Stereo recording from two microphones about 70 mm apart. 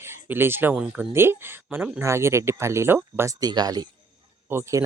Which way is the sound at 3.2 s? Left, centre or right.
Right.